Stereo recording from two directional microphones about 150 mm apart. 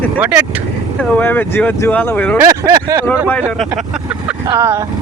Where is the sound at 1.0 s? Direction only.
10° left (ahead or behind).